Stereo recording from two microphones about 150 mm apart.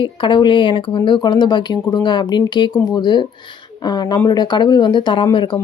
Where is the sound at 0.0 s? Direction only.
35° left (ahead or behind).